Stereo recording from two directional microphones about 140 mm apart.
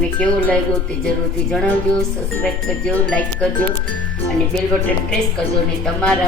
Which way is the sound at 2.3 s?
15° left (ahead or behind).